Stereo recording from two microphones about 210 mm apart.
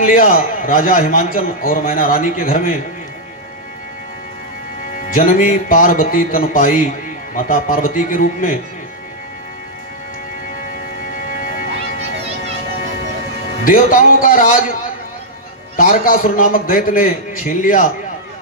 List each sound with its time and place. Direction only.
0.0 s a man's voice: 40° left (ahead or behind)
4.9 s a man's voice: 40° left (ahead or behind)
11.0 s music: 40° left (ahead or behind)
13.7 s a man's voice: 40° left (ahead or behind)